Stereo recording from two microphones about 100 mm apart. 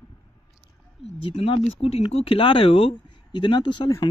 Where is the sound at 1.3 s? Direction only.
75° left (ahead or behind).